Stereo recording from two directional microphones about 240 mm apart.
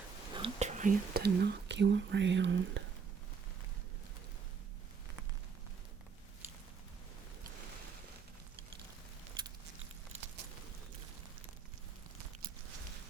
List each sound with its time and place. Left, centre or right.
0.3 s speech: right